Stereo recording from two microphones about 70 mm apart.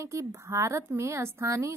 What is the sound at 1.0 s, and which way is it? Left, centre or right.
Music, right.